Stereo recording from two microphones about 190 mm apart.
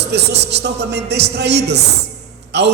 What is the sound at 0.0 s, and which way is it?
A man's voice, 65° right (ahead or behind).